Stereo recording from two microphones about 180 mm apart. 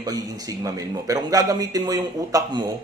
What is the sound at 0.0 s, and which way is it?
Speech, 20° right (ahead or behind).